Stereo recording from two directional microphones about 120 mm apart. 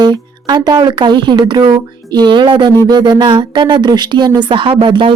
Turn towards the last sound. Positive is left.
turn(degrees=-45)  # may be behind; listen again after turning